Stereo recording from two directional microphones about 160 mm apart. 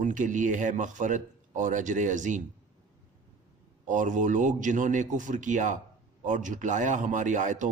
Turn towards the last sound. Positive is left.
turn(degrees=-50)  # may be behind; listen again after turning